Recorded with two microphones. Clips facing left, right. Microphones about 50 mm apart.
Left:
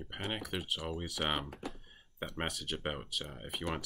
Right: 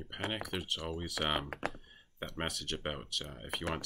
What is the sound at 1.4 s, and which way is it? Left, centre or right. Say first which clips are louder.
Speech: right 5 dB; right.